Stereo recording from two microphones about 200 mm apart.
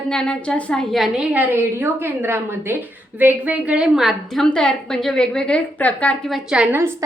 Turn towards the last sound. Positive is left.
turn(degrees=-10)  # may be behind; listen again after turning